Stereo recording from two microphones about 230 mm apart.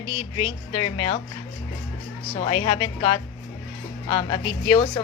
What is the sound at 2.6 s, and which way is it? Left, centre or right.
A woman's voice, left.